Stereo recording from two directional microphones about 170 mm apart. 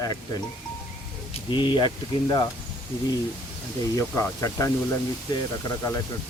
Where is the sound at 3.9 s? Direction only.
15° left (ahead or behind).